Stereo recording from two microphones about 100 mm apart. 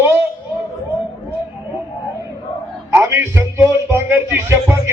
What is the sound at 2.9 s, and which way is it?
A man's voice, 20° right (ahead or behind).